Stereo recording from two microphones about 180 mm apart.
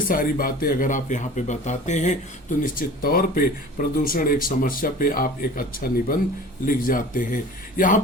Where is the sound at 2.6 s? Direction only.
55° left (ahead or behind).